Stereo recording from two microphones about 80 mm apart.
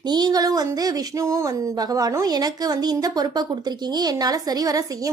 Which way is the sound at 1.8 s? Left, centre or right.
Right.